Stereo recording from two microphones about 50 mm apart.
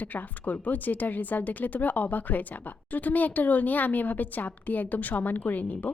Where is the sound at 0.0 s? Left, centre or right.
Left.